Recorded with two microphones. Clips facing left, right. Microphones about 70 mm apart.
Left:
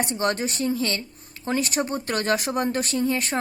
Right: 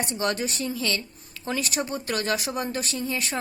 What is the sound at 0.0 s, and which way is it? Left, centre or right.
A woman's voice, left.